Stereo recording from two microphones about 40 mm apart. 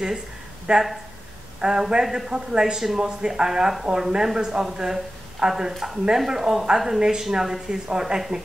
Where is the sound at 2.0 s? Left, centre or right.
Centre.